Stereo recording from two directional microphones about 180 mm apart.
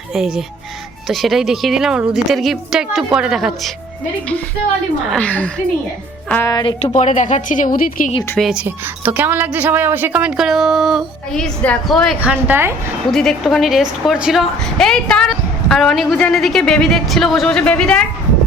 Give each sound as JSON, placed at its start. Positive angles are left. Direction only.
{"t": 0.1, "sound": "a woman's voice", "side_deg": -5}
{"t": 5.0, "sound": "a woman's voice", "side_deg": 5}
{"t": 6.5, "sound": "speech", "side_deg": 20}
{"t": 6.9, "sound": "speech", "side_deg": 40}
{"t": 8.4, "sound": "a woman's voice", "side_deg": -5}
{"t": 13.1, "sound": "a woman's voice", "side_deg": 0}